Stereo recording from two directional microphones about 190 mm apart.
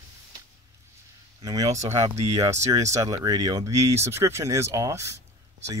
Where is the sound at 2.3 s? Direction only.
15° right (ahead or behind).